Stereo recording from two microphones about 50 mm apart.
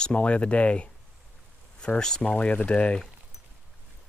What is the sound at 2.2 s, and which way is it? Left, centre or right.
Speech, left.